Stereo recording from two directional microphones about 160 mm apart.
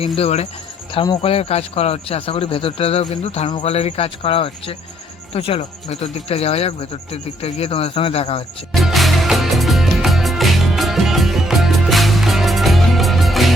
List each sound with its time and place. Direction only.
0.0 s speech: 40° left (ahead or behind)
8.7 s music: centre (ahead or behind)